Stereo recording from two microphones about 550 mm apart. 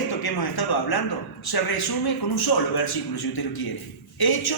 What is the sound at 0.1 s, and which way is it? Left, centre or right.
A man's voice, left.